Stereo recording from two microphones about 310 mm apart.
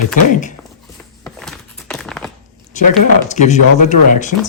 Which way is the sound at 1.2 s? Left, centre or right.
Centre.